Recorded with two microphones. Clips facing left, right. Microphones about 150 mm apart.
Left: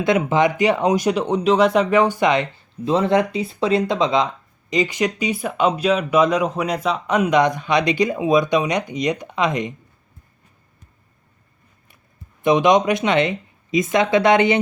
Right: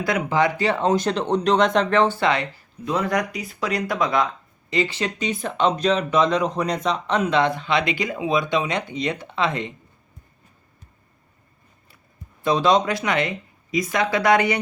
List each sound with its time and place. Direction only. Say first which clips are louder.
0.0 s speech: left 4 dB; 20° left (ahead or behind)
12.4 s speech: left 3 dB; 15° left (ahead or behind)